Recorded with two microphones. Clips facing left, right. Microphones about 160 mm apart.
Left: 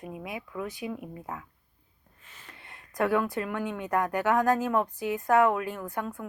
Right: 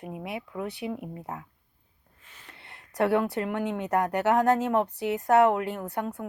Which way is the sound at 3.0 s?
30° right (ahead or behind).